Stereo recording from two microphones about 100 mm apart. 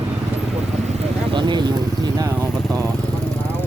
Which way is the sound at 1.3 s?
50° right (ahead or behind).